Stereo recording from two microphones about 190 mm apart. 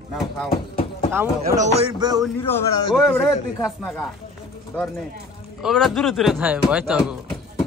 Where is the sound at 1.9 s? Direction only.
20° right (ahead or behind).